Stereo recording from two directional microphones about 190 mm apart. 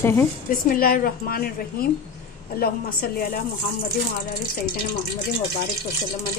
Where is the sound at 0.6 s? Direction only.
50° left (ahead or behind).